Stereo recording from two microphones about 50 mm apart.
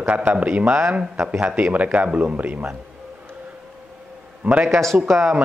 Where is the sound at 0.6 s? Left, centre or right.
Centre.